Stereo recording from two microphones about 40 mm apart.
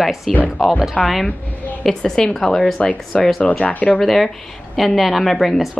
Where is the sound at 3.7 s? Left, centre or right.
Left.